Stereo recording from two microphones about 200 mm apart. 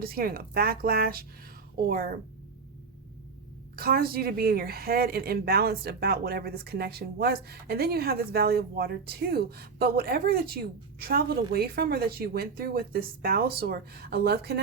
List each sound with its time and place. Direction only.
0.0 s a woman's voice: 50° right (ahead or behind)
3.8 s a woman's voice: 50° right (ahead or behind)